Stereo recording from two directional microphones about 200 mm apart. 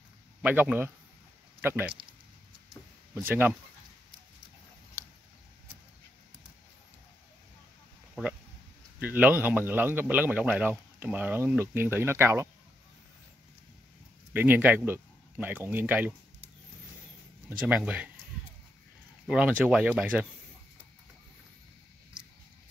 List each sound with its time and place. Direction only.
0.4 s a man's voice: 5° right (ahead or behind)
3.2 s a man's voice: 10° right (ahead or behind)
9.0 s a man's voice: 10° right (ahead or behind)
14.3 s a man's voice: 10° right (ahead or behind)
17.5 s a man's voice: 5° right (ahead or behind)
19.2 s speech: 5° right (ahead or behind)